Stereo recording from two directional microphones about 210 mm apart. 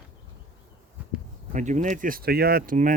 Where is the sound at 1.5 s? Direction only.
35° right (ahead or behind).